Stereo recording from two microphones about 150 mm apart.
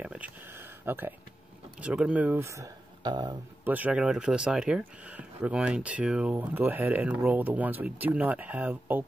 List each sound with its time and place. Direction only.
0.0 s a sound: 10° right (ahead or behind)
1.8 s speech: 10° right (ahead or behind); by 3.3 s 30° right (ahead or behind)
3.6 s speech: 10° right (ahead or behind)